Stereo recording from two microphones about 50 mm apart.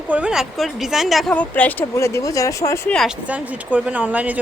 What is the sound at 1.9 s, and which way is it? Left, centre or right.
Speech, left.